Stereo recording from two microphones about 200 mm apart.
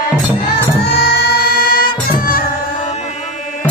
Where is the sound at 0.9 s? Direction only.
50° left (ahead or behind).